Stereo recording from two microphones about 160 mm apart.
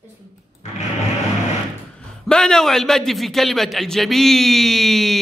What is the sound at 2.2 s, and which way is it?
A man's voice, 5° left (ahead or behind).